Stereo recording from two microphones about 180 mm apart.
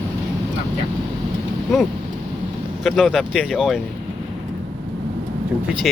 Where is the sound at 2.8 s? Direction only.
Centre (ahead or behind).